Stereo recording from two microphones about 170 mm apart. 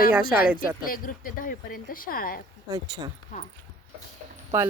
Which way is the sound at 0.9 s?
55° left (ahead or behind).